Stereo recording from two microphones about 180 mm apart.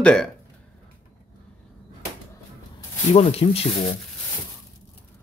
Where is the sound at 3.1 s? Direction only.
35° left (ahead or behind).